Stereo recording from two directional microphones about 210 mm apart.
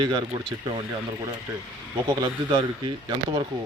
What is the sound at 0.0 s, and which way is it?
Speech, 20° right (ahead or behind).